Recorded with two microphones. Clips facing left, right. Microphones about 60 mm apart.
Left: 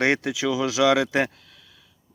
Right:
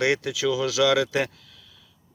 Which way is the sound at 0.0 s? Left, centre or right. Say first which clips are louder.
Left 1 dB; left.